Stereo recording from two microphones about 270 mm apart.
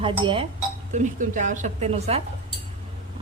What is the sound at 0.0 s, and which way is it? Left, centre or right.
A woman's voice, centre.